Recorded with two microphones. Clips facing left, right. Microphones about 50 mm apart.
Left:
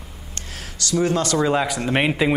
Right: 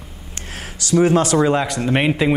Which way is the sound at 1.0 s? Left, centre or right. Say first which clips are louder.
Right 5 dB; centre.